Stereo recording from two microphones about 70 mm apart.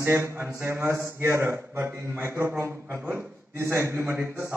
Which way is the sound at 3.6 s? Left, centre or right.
Right.